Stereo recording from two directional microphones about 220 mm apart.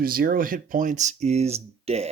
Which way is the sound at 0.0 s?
40° right (ahead or behind).